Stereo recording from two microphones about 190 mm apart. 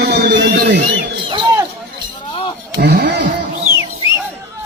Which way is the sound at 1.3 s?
25° right (ahead or behind).